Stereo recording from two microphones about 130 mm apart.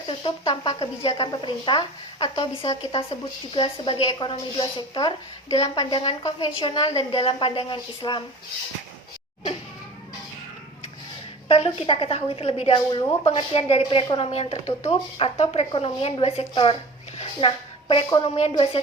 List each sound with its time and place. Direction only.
0.1 s speech: 40° left (ahead or behind)
5.9 s a woman's voice: 45° left (ahead or behind)
11.4 s a woman's voice: 50° left (ahead or behind)
14.0 s speech: 40° left (ahead or behind)
14.8 s a woman's voice: 50° left (ahead or behind)
18.2 s speech: 55° left (ahead or behind)
18.5 s a woman's voice: 45° left (ahead or behind)